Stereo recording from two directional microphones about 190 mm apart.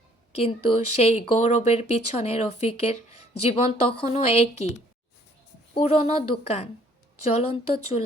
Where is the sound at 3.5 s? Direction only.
30° left (ahead or behind).